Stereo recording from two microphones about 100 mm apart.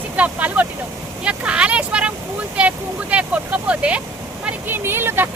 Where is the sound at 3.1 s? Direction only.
10° right (ahead or behind).